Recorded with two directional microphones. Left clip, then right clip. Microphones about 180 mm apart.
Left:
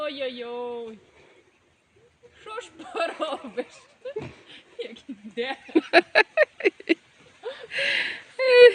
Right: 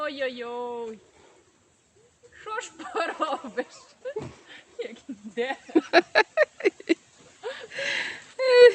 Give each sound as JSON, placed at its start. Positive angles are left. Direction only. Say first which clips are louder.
{"t": 0.0, "sound": "speech", "louder": "even", "side_deg": 15}
{"t": 2.4, "sound": "speech", "louder": "right 3 dB", "side_deg": 20}
{"t": 4.2, "sound": "speech", "louder": "left 1 dB", "side_deg": 0}
{"t": 4.4, "sound": "a sound", "louder": "even", "side_deg": 25}
{"t": 5.6, "sound": "a sound", "louder": "left 2 dB", "side_deg": 0}
{"t": 7.4, "sound": "gasp", "louder": "left 4 dB", "side_deg": 10}